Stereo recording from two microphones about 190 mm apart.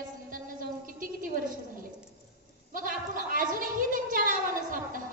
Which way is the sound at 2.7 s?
45° right (ahead or behind).